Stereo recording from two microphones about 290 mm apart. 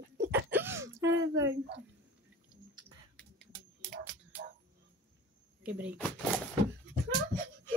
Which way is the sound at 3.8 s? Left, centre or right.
Right.